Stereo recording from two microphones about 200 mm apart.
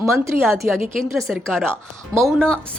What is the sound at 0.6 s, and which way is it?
A woman's voice, 10° right (ahead or behind).